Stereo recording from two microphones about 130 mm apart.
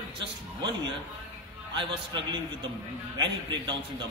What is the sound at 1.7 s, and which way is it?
A man's voice, 35° right (ahead or behind).